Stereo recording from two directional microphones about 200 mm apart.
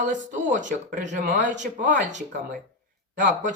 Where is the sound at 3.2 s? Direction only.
40° right (ahead or behind).